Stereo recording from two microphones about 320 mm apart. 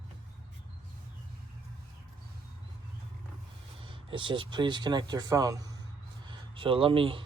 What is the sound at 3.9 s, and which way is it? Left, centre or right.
Speech, centre.